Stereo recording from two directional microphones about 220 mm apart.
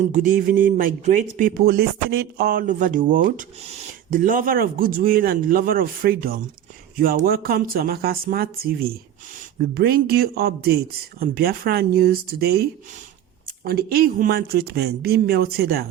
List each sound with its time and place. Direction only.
0.0 s speech: 35° right (ahead or behind)
13.7 s speech: 45° right (ahead or behind)